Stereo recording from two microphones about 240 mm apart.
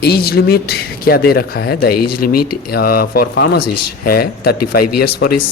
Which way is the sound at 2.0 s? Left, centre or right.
Left.